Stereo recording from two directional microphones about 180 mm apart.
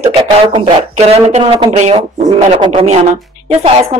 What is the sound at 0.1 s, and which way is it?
Speech, 35° right (ahead or behind).